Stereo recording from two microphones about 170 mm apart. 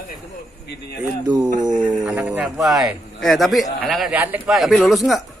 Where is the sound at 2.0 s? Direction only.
5° right (ahead or behind).